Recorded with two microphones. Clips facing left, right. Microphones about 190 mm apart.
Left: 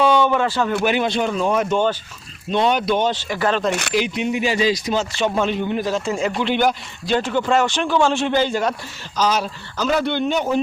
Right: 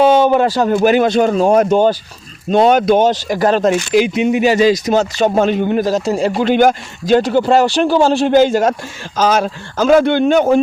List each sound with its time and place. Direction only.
0.0 s a man's voice: 40° right (ahead or behind)
4.3 s speech: 60° right (ahead or behind)
4.5 s a man's voice: 45° right (ahead or behind)